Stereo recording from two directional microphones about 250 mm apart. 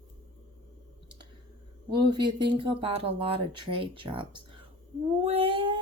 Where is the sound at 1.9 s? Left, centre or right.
Centre.